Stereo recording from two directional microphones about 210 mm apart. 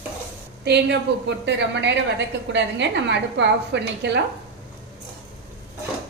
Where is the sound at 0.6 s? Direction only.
50° right (ahead or behind).